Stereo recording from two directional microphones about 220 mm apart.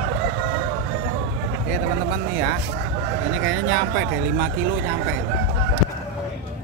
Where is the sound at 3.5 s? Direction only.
55° right (ahead or behind).